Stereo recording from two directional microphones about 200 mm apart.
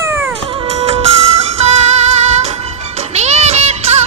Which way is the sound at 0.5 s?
30° right (ahead or behind).